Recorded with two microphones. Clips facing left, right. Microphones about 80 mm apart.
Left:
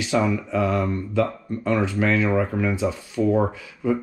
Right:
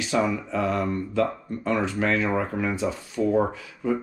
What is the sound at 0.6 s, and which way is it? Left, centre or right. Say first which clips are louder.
Mantra: left 2 dB; right.